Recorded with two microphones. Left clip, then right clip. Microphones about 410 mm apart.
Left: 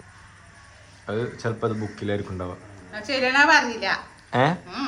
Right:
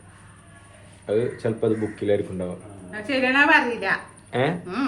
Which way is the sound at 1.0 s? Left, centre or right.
Centre.